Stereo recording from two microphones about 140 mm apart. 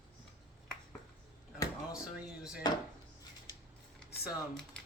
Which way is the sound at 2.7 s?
30° left (ahead or behind).